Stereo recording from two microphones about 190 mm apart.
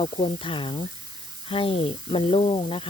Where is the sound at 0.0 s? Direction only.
30° left (ahead or behind).